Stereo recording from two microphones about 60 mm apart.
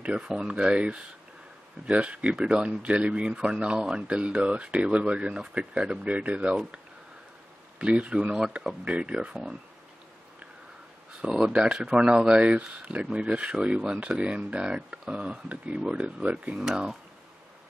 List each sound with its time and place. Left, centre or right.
0.0 s speech: centre
7.8 s speech: centre
11.1 s speech: centre